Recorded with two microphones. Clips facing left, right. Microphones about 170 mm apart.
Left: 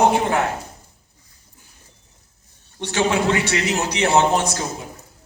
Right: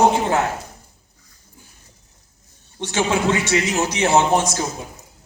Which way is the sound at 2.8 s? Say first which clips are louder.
Even; 20° right (ahead or behind).